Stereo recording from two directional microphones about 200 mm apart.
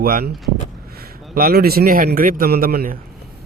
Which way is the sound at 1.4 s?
50° right (ahead or behind).